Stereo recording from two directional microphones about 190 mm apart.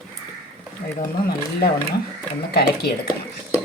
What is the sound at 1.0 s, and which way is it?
Speech, 50° left (ahead or behind).